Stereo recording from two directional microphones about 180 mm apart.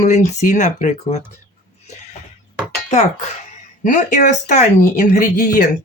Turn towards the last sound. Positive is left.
turn(degrees=45)  # may be behind; listen again after turning